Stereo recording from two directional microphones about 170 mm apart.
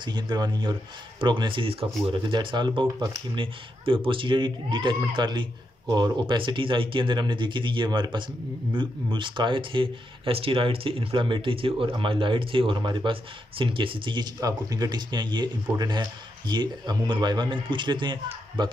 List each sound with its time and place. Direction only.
0.0 s speech: 25° right (ahead or behind)